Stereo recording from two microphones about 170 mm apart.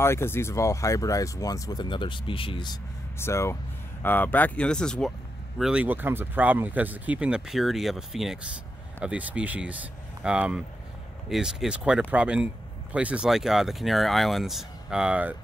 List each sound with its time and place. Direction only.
0.0 s speech: 15° left (ahead or behind)
3.2 s speech: 15° left (ahead or behind)
5.6 s speech: 5° right (ahead or behind)